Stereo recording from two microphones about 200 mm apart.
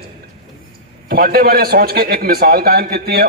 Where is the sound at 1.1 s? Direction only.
50° right (ahead or behind).